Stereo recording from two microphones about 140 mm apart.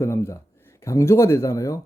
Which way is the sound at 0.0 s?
20° left (ahead or behind).